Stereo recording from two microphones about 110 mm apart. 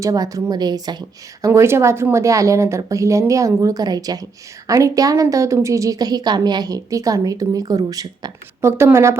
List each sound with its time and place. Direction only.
0.0 s speech: 30° right (ahead or behind)
1.5 s a woman's voice: 25° right (ahead or behind)